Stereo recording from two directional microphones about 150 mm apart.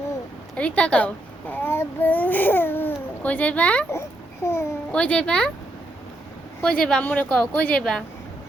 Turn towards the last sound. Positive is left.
turn(degrees=5)  # may be behind; listen again after turning